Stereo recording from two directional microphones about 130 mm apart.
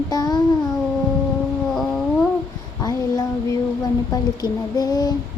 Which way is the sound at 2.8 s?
30° left (ahead or behind).